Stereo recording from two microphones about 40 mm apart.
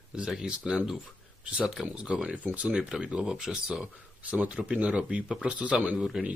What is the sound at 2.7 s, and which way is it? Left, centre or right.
Speech, right.